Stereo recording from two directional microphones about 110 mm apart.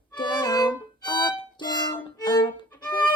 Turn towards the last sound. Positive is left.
turn(degrees=40)  # may be behind; listen again after turning